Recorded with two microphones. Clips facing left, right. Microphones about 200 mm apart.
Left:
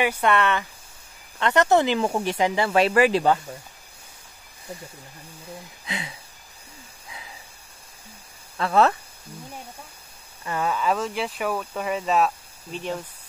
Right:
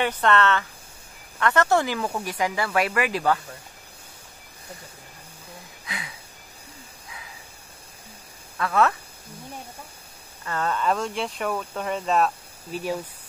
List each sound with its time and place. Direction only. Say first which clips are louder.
0.0 s speech: even; 10° left (ahead or behind); by 3.3 s 25° left (ahead or behind)
5.9 s a sound: left 4 dB; 25° left (ahead or behind)
8.5 s speech: left 2 dB; 30° left (ahead or behind)
10.4 s speech: left 1 dB; 10° left (ahead or behind); by 13.0 s 5° right (ahead or behind)